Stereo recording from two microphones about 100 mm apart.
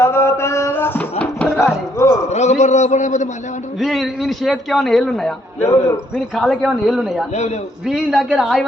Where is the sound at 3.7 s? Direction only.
Centre (ahead or behind).